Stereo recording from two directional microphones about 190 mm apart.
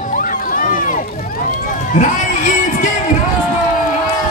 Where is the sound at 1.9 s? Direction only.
40° left (ahead or behind).